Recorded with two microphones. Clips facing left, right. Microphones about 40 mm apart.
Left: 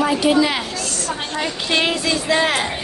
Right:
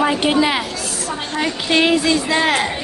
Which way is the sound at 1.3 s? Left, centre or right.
Centre.